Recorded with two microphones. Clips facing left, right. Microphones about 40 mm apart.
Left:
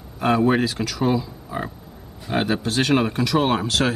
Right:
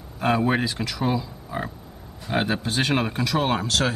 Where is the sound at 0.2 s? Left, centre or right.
Centre.